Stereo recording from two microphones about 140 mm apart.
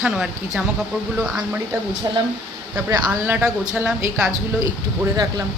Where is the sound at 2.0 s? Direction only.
25° right (ahead or behind).